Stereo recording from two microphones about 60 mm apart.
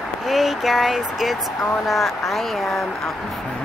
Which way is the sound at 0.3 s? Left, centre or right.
Centre.